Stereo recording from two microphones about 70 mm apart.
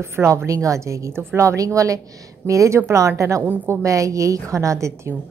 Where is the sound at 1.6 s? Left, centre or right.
Right.